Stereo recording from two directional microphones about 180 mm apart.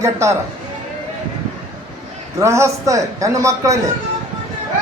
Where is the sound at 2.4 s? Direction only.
15° right (ahead or behind).